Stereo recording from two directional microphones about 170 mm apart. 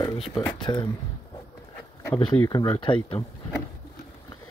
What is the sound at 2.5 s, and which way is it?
Speech, 25° left (ahead or behind).